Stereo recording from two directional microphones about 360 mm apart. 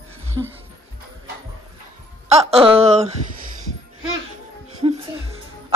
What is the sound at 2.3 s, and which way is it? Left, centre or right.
Speech, centre.